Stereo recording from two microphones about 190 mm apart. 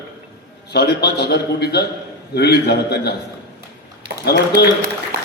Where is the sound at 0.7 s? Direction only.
60° left (ahead or behind).